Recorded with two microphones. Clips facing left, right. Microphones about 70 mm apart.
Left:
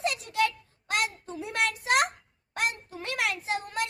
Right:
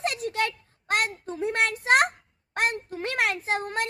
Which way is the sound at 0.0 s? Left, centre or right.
Right.